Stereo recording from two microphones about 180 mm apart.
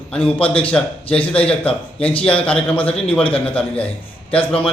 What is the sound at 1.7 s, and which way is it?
Speech, 30° left (ahead or behind).